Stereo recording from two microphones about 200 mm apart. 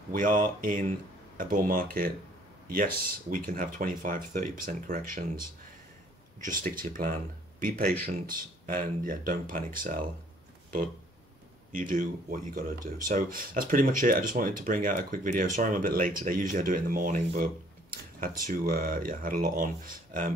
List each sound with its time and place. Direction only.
0.1 s speech: 40° right (ahead or behind)
6.4 s speech: 45° right (ahead or behind)
11.7 s speech: 45° right (ahead or behind)